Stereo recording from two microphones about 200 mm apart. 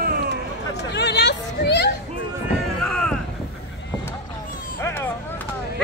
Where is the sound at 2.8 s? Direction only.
5° left (ahead or behind).